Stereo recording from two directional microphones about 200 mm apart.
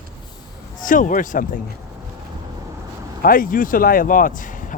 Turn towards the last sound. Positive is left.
turn(degrees=40)  # may be behind; listen again after turning